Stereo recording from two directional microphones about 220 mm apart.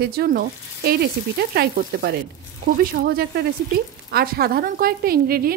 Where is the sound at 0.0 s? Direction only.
45° right (ahead or behind).